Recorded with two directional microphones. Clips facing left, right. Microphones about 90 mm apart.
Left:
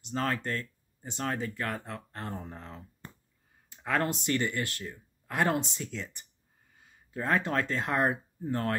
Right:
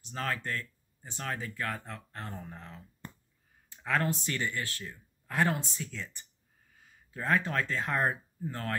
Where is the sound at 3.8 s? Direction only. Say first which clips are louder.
Left 1 dB; 40° left (ahead or behind).